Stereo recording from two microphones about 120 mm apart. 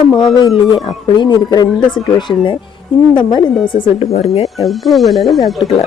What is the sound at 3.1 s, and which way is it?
Speech, 40° left (ahead or behind).